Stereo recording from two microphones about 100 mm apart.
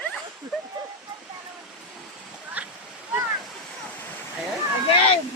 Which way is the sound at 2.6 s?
15° right (ahead or behind).